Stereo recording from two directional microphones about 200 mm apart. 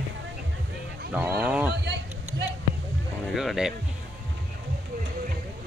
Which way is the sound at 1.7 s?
55° right (ahead or behind).